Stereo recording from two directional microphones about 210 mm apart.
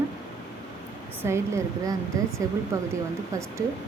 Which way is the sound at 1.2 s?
10° right (ahead or behind).